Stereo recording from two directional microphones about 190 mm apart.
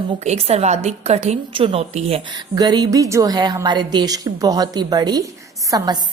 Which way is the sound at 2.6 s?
20° right (ahead or behind).